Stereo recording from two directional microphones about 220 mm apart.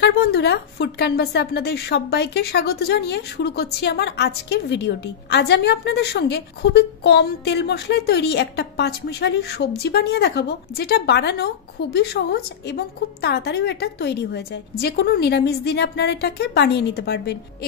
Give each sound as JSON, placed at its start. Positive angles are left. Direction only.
{"t": 0.0, "sound": "a woman's voice", "side_deg": 50}